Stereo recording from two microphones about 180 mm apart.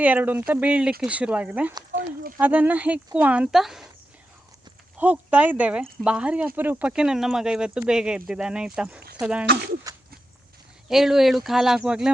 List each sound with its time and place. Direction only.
0.0 s speech: 10° right (ahead or behind)
4.9 s speech: 10° right (ahead or behind)
9.9 s a sound: 20° right (ahead or behind)
10.8 s speech: centre (ahead or behind)